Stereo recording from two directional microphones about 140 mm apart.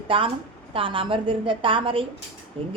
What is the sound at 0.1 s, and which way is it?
A woman's voice, 40° right (ahead or behind).